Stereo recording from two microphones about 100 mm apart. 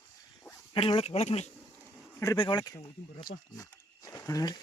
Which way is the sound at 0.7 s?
70° left (ahead or behind).